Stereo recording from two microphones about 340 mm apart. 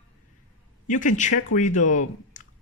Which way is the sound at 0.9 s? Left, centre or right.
Left.